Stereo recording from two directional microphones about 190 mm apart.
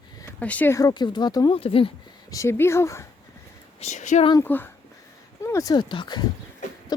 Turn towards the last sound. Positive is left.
turn(degrees=25)  # may be behind; listen again after turning